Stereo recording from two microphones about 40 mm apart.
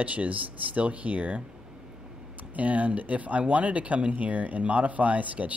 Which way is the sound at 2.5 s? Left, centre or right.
Right.